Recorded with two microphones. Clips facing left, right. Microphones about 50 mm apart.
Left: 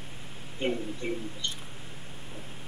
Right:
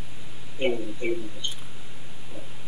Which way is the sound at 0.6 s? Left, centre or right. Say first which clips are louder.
Right 5 dB; right.